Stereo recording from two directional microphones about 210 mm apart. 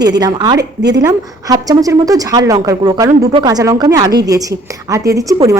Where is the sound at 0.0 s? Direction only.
20° right (ahead or behind).